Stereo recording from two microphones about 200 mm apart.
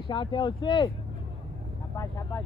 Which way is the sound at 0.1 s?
25° left (ahead or behind).